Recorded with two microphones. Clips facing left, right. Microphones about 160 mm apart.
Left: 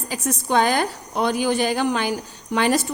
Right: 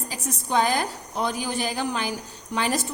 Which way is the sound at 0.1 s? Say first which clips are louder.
Left 5 dB; 75° left (ahead or behind).